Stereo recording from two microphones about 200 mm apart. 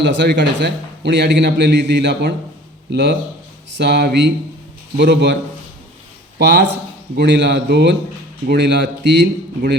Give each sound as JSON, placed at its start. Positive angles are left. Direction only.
{"t": 0.0, "sound": "a man's voice", "side_deg": -60}
{"t": 6.4, "sound": "a man's voice", "side_deg": -60}